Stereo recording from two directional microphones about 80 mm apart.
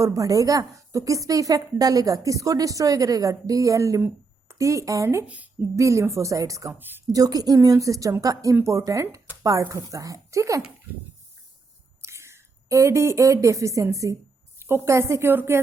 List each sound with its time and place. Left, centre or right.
0.0 s a woman's voice: right
5.2 s speech: centre
5.7 s a woman's voice: right
12.0 s a woman's voice: right